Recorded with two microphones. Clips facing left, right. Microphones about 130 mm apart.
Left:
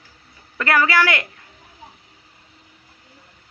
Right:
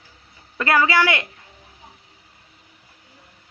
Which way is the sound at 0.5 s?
20° right (ahead or behind).